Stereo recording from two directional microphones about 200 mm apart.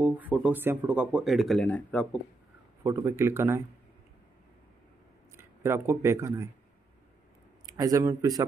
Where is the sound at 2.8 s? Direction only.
15° right (ahead or behind).